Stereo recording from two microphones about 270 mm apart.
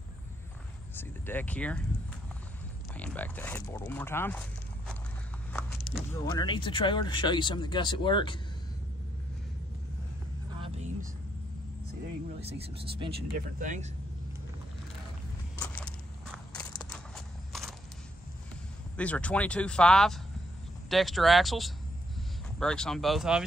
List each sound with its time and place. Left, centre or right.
0.9 s speech: centre
2.9 s speech: centre
6.1 s speech: centre
10.5 s vehicle: right
12.4 s speech: right
15.6 s walk: centre
16.5 s a sound: centre
18.9 s speech: centre